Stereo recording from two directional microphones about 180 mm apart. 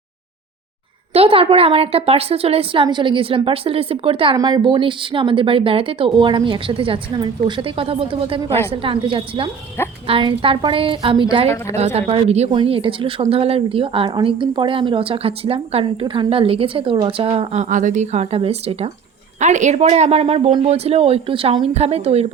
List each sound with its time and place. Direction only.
1.1 s a woman's voice: 30° right (ahead or behind)